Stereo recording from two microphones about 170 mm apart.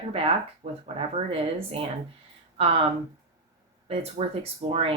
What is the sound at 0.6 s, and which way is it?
Speech, 35° right (ahead or behind).